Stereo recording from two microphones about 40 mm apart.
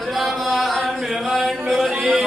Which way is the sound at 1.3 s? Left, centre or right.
Centre.